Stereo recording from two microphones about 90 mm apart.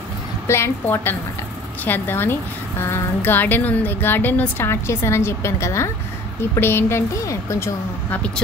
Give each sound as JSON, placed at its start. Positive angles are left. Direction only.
{"t": 0.5, "sound": "speech", "side_deg": 30}